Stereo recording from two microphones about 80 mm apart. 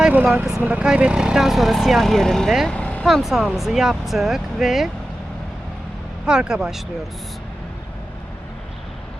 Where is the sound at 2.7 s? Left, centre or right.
Centre.